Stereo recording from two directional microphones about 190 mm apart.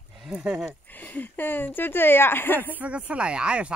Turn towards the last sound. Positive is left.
turn(degrees=-5)  # may be behind; listen again after turning